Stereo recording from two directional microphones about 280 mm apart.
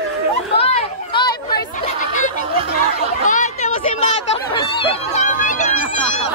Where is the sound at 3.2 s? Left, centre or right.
Left.